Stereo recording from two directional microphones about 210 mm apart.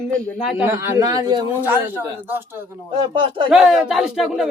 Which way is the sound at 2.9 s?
25° right (ahead or behind).